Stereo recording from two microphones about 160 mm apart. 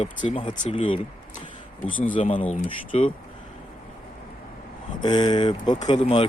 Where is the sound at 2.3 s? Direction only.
35° left (ahead or behind).